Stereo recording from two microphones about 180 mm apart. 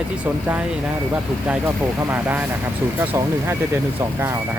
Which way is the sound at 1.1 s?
10° right (ahead or behind).